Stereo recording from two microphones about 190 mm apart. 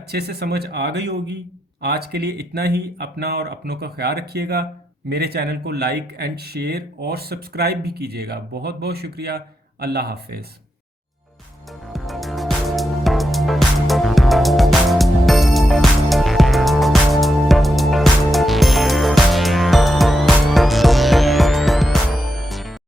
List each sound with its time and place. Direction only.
0.1 s speech: 55° right (ahead or behind)
11.9 s music: centre (ahead or behind)